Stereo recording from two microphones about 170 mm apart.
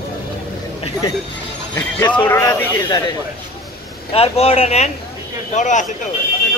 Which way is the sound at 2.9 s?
25° left (ahead or behind).